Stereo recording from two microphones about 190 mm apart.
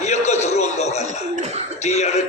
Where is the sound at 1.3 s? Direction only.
35° right (ahead or behind).